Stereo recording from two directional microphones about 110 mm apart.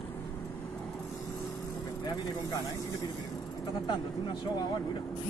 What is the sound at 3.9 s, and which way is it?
Speech, 40° left (ahead or behind).